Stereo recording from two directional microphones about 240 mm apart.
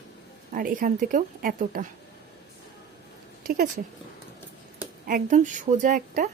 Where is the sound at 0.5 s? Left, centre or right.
Right.